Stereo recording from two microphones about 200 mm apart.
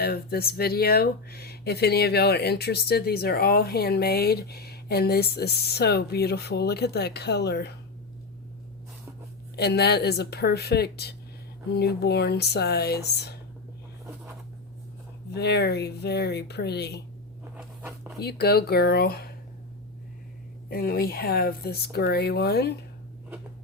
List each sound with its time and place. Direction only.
0.0 s speech: 50° left (ahead or behind)
9.6 s speech: 55° left (ahead or behind)
15.3 s speech: 55° left (ahead or behind)
17.5 s a sound: 5° right (ahead or behind)
18.2 s speech: 55° left (ahead or behind)
20.7 s speech: 45° left (ahead or behind)